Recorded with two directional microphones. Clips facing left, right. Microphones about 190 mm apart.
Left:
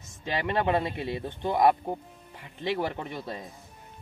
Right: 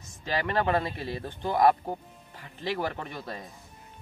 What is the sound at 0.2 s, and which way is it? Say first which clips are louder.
Speech: even; 20° left (ahead or behind).